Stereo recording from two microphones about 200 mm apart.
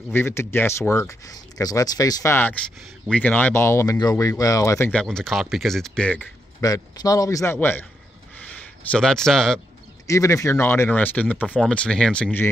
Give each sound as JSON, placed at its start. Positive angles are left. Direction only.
{"t": 0.1, "sound": "speech", "side_deg": 10}
{"t": 6.6, "sound": "speech", "side_deg": 15}
{"t": 8.4, "sound": "a sound", "side_deg": 5}
{"t": 10.0, "sound": "speech", "side_deg": 15}